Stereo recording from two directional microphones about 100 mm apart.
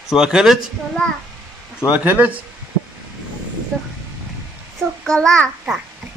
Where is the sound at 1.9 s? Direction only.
15° right (ahead or behind).